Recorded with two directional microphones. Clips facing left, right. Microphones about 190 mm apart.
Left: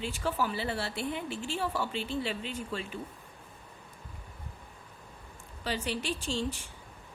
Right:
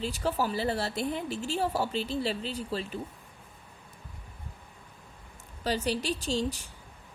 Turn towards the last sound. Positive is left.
turn(degrees=-40)  # may be behind; listen again after turning